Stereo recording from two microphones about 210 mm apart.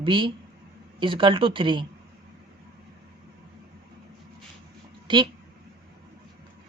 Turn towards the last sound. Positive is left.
turn(degrees=-20)  # may be behind; listen again after turning